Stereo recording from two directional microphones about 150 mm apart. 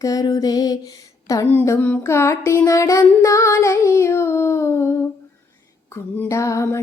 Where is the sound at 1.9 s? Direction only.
15° left (ahead or behind).